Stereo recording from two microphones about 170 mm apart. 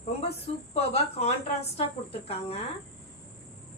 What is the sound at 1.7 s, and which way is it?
Speech, 35° left (ahead or behind).